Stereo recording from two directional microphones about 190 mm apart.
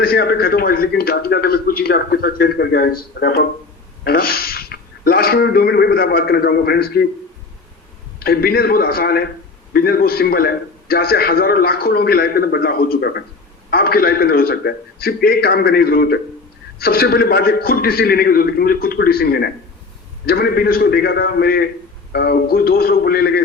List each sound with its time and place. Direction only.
0.0 s a man's voice: 55° left (ahead or behind)
8.2 s a man's voice: 55° left (ahead or behind)